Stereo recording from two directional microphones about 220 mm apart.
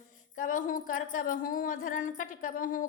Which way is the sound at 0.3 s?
35° left (ahead or behind).